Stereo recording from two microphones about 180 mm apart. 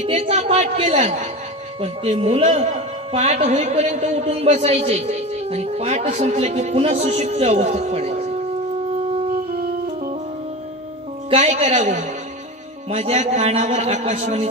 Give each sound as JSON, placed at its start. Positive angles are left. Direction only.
{"t": 0.0, "sound": "a woman's voice", "side_deg": -35}
{"t": 11.2, "sound": "a woman's voice", "side_deg": -40}